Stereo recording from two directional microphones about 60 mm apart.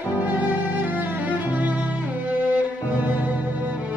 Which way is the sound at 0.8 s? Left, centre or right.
Right.